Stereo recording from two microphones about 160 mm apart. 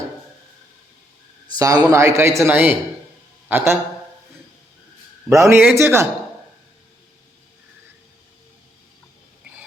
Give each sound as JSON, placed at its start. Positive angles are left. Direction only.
{"t": 1.5, "sound": "a man's voice", "side_deg": -20}
{"t": 5.3, "sound": "speech", "side_deg": -15}